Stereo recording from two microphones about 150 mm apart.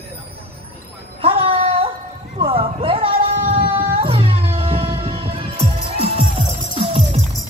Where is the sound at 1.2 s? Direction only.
40° right (ahead or behind).